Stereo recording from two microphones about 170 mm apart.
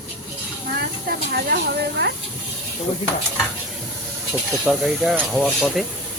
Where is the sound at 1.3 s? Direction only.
70° right (ahead or behind).